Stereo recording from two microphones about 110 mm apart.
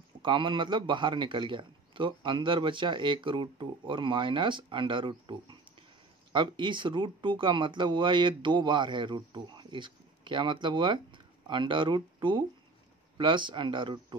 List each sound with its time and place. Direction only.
0.2 s speech: 45° right (ahead or behind)